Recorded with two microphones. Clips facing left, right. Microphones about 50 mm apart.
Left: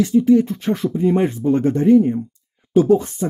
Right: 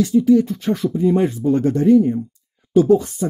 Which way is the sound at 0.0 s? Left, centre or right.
Left.